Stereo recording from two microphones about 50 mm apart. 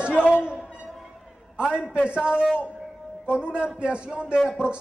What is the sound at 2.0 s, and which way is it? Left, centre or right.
A man's voice, right.